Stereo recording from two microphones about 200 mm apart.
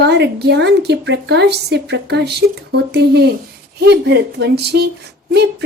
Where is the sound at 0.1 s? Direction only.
55° right (ahead or behind).